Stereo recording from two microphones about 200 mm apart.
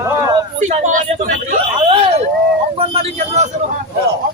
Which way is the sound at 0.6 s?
40° right (ahead or behind).